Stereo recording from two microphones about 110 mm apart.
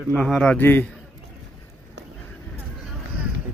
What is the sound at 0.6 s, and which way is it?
Speech, 20° left (ahead or behind).